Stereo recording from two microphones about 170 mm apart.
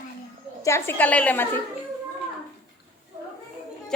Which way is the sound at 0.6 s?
15° left (ahead or behind).